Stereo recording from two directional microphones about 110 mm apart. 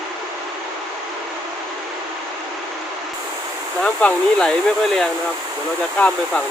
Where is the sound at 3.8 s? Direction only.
10° left (ahead or behind).